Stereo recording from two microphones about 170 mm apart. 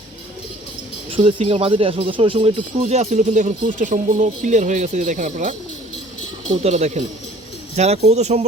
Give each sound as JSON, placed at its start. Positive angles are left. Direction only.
{"t": 1.1, "sound": "speech", "side_deg": -35}
{"t": 6.6, "sound": "speech", "side_deg": -40}